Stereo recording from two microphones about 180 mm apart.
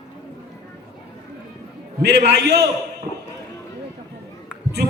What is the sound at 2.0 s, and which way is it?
Speech, 65° right (ahead or behind).